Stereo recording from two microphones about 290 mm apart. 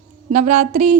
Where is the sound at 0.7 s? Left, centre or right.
Right.